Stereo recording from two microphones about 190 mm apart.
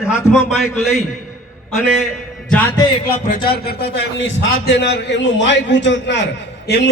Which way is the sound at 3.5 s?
55° left (ahead or behind).